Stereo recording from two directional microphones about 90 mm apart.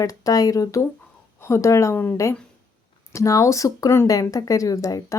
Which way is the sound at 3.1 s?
35° left (ahead or behind).